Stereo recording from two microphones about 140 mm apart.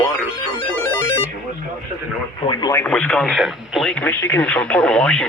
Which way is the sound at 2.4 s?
30° left (ahead or behind).